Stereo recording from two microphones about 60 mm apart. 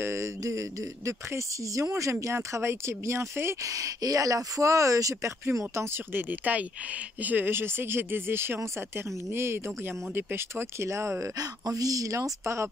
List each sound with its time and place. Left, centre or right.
0.0 s speech: right
0.4 s speech: right
3.6 s speech: right
6.1 s speech: right
11.3 s speech: right